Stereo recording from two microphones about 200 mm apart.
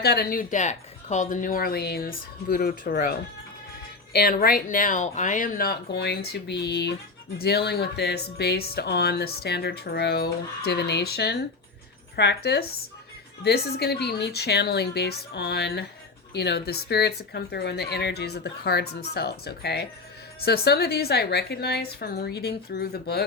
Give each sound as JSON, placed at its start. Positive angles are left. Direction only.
{"t": 0.0, "sound": "speech", "side_deg": 50}